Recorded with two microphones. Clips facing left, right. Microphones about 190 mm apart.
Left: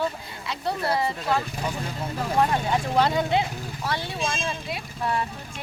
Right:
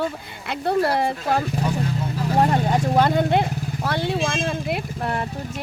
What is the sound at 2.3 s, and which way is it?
Speech, 35° right (ahead or behind).